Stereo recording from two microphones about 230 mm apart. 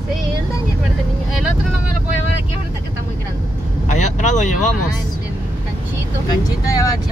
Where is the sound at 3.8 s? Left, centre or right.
Left.